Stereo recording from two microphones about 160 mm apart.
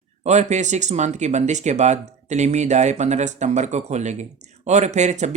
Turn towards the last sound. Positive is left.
turn(degrees=-45)  # may be behind; listen again after turning